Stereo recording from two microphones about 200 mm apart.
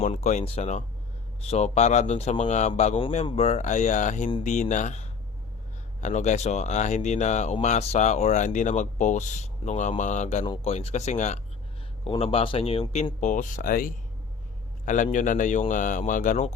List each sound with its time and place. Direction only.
0.0 s speech: 35° left (ahead or behind)
10.4 s speech: 25° left (ahead or behind)